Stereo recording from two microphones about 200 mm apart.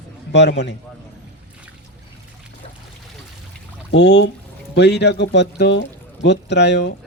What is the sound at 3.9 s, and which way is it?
A man's voice, 60° left (ahead or behind).